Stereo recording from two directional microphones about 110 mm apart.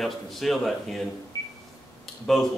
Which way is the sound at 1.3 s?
30° left (ahead or behind).